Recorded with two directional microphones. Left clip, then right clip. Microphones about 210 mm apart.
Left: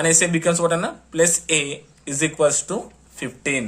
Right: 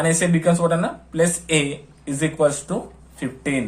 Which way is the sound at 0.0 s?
35° left (ahead or behind).